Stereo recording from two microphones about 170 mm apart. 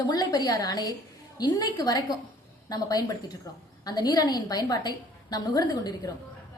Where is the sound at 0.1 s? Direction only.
25° left (ahead or behind).